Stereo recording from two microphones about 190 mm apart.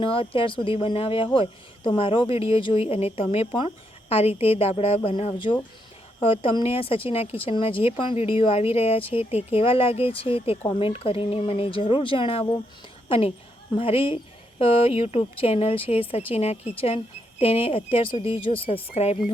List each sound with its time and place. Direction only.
0.0 s a woman's voice: 30° left (ahead or behind)